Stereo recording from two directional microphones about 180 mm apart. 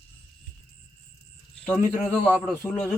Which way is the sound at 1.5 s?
5° left (ahead or behind).